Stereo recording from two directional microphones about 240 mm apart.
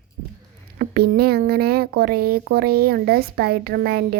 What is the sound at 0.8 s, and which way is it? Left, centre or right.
Speech, right.